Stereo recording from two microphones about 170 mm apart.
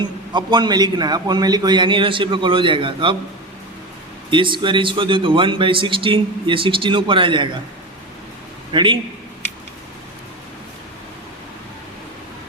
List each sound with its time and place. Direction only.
0.0 s speech: 25° right (ahead or behind)
4.3 s speech: 30° right (ahead or behind)
8.7 s a man's voice: 30° right (ahead or behind)